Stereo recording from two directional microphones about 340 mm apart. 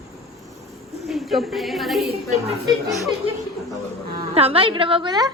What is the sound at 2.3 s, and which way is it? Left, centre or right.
Speech, centre.